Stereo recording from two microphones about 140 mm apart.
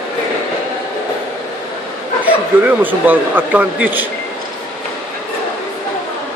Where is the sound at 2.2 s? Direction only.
15° right (ahead or behind).